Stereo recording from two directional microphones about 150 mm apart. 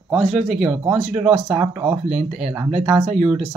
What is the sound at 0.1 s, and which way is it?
Speech, centre (ahead or behind).